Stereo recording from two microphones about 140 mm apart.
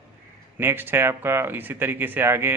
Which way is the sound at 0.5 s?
15° right (ahead or behind).